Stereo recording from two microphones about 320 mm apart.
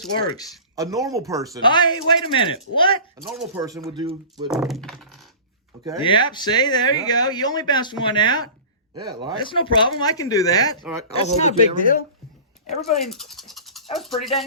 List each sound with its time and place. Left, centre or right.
0.3 s speech: centre
0.8 s speech: centre
1.6 s speech: centre
3.2 s speech: centre
4.4 s speech: centre
6.0 s speech: centre
9.0 s speech: centre
9.4 s speech: centre
11.1 s speech: left
12.8 s speech: centre